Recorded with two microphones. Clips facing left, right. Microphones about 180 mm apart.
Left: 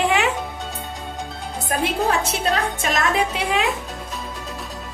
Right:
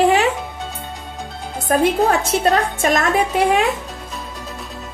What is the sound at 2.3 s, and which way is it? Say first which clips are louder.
A woman's voice: right 5 dB; 50° right (ahead or behind).